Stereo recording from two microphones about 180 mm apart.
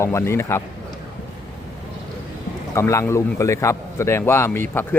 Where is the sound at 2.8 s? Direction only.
15° left (ahead or behind).